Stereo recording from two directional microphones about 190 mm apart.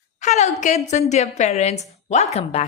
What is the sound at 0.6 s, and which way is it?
A woman's voice, 40° left (ahead or behind).